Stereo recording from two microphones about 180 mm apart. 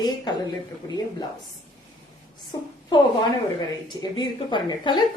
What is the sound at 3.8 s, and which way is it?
A woman's voice, 25° left (ahead or behind).